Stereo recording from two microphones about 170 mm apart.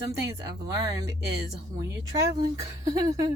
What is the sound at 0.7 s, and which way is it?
Speech, 20° right (ahead or behind).